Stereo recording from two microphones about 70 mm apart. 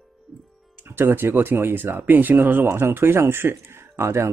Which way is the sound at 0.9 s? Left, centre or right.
Right.